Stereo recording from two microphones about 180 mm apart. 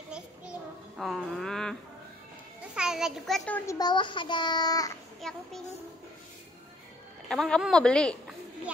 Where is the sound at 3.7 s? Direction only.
25° left (ahead or behind).